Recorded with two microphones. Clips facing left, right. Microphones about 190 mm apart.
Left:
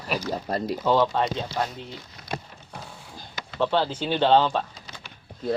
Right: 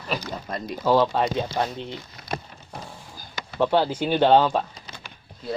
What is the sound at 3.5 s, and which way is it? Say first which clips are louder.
Speech: right 3 dB; 15° right (ahead or behind).